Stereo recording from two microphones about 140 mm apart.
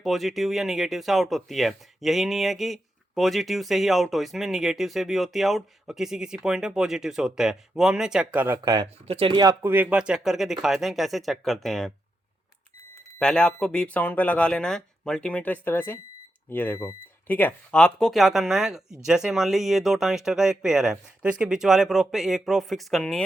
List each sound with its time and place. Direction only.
0.0 s speech: centre (ahead or behind)
8.6 s speech: 30° right (ahead or behind)
9.0 s speech: 40° right (ahead or behind)
9.6 s speech: 10° right (ahead or behind)
13.1 s speech: 5° left (ahead or behind)